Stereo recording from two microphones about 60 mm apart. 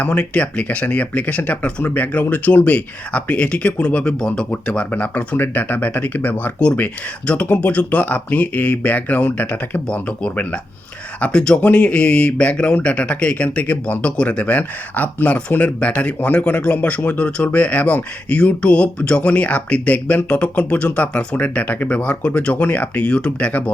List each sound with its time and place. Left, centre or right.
0.0 s a man's voice: left
9.9 s a man's voice: centre